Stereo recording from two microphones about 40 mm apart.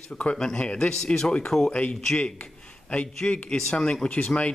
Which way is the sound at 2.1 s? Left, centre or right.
Left.